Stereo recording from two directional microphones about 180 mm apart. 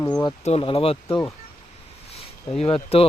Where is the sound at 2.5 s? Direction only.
35° left (ahead or behind).